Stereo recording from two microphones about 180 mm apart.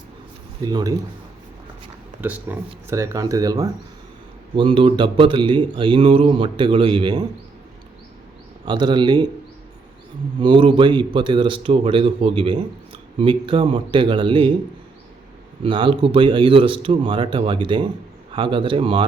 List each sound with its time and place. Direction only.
0.6 s a man's voice: 20° right (ahead or behind)
2.2 s a man's voice: 10° right (ahead or behind); by 7.3 s 25° right (ahead or behind)
8.6 s a man's voice: 25° right (ahead or behind)
10.4 s a man's voice: 25° right (ahead or behind)
15.6 s a man's voice: 30° right (ahead or behind)